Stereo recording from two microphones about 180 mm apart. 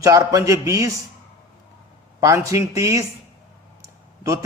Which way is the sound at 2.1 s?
20° right (ahead or behind).